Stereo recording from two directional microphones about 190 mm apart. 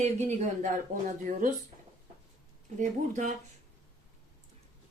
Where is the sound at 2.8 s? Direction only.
40° right (ahead or behind).